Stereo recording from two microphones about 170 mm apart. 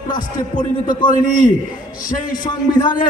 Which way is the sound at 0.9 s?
25° left (ahead or behind).